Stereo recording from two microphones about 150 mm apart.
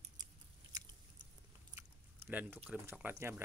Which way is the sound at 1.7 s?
10° right (ahead or behind).